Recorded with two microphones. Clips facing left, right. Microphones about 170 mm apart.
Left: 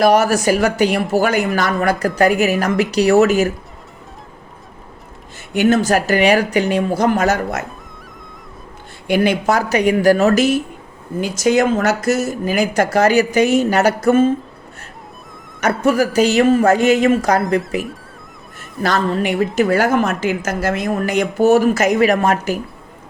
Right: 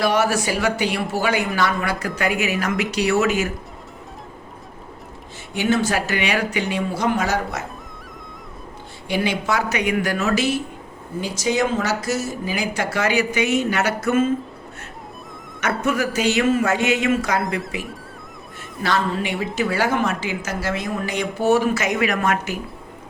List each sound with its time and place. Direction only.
0.0 s speech: 40° left (ahead or behind)
5.5 s a woman's voice: 45° left (ahead or behind)
9.0 s speech: 50° left (ahead or behind)
11.3 s a woman's voice: 50° left (ahead or behind); by 14.3 s 30° left (ahead or behind)
15.6 s speech: 35° left (ahead or behind)
18.8 s a woman's voice: 45° left (ahead or behind)